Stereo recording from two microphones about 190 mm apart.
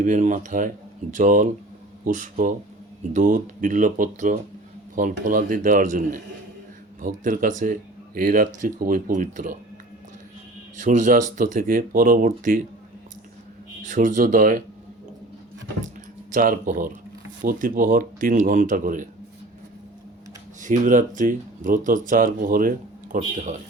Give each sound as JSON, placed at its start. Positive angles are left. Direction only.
{"t": 0.0, "sound": "speech", "side_deg": -40}
{"t": 10.8, "sound": "speech", "side_deg": -40}
{"t": 13.8, "sound": "speech", "side_deg": -40}
{"t": 16.3, "sound": "speech", "side_deg": -45}
{"t": 20.6, "sound": "speech", "side_deg": -40}